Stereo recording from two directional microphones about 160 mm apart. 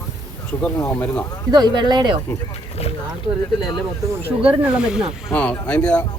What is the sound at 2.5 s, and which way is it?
Boat, 40° left (ahead or behind).